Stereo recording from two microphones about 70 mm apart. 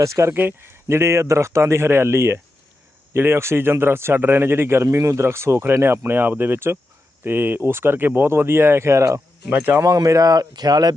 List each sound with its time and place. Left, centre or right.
0.0 s speech: right
0.3 s speech: right
9.5 s speech: right
9.8 s speech: right